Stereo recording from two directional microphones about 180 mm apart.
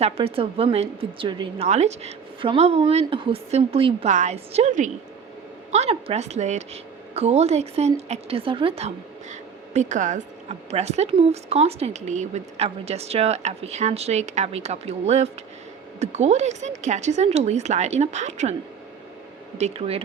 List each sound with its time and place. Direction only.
0.0 s speech: 30° right (ahead or behind)
1.6 s speech: 35° right (ahead or behind)
9.3 s speech: 40° right (ahead or behind)
19.5 s speech: 35° right (ahead or behind)